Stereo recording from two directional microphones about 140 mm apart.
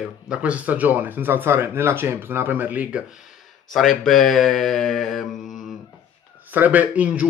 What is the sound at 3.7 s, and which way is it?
Speech, centre (ahead or behind).